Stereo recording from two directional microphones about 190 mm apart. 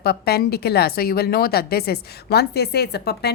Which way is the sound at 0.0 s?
55° left (ahead or behind).